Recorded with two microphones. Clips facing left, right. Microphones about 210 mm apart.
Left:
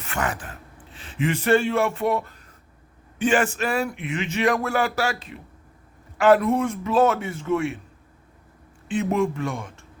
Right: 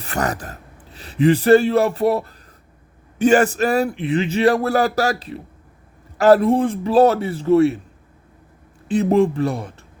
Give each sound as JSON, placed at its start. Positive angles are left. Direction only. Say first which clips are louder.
{"t": 0.0, "sound": "a man's voice", "louder": "right 5 dB", "side_deg": -40}
{"t": 8.9, "sound": "speech", "louder": "right 7 dB", "side_deg": -35}